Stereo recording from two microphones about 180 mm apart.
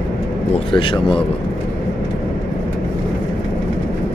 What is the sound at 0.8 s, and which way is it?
Speech, 30° left (ahead or behind).